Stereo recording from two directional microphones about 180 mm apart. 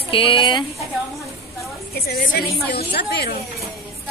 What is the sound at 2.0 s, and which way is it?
A woman's voice, 55° left (ahead or behind).